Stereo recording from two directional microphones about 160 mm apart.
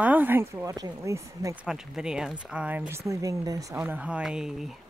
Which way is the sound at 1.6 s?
5° right (ahead or behind).